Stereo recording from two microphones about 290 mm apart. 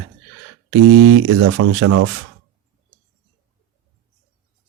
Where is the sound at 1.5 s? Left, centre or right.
Right.